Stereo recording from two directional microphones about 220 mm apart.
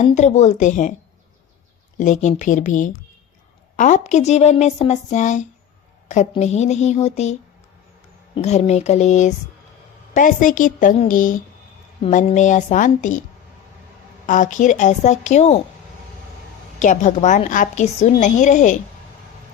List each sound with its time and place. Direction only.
0.0 s a woman's voice: 30° left (ahead or behind)
2.0 s a woman's voice: 35° left (ahead or behind)
8.4 s a woman's voice: 30° left (ahead or behind)
14.3 s a woman's voice: 35° left (ahead or behind)
16.8 s a woman's voice: 35° left (ahead or behind)